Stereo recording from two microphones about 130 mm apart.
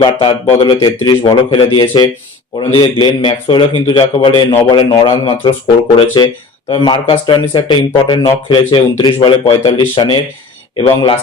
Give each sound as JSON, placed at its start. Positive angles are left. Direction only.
{"t": 0.0, "sound": "speech", "side_deg": 45}